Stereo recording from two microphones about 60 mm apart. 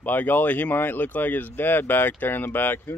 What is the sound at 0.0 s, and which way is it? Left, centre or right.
Speech, left.